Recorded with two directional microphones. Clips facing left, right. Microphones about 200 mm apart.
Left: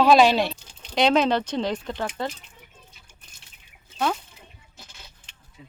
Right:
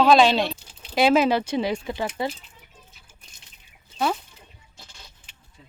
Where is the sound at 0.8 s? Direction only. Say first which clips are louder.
Right 1 dB; 5° right (ahead or behind).